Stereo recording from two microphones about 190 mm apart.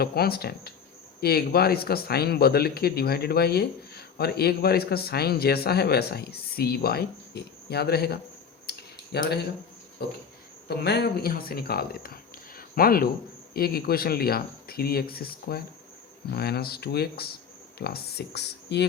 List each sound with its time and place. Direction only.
0.0 s speech: 55° left (ahead or behind)
8.7 s a sound: 60° left (ahead or behind)
9.1 s speech: 60° left (ahead or behind)
10.7 s speech: 60° left (ahead or behind)